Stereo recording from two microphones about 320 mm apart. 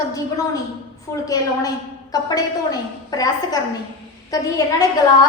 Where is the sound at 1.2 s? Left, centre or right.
Centre.